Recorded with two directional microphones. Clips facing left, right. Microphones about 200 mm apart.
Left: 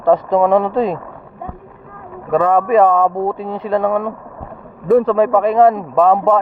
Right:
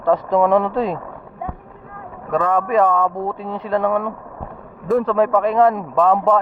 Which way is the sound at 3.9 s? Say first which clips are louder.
Left 2 dB; 35° left (ahead or behind).